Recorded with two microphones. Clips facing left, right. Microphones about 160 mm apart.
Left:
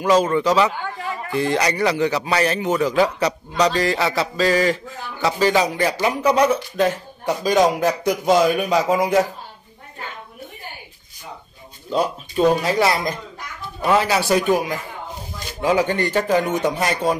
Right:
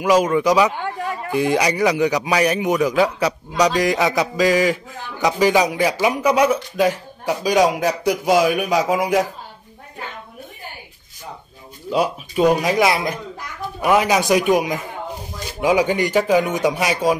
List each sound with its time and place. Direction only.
0.0 s a man's voice: 10° right (ahead or behind)
11.9 s a man's voice: 10° right (ahead or behind)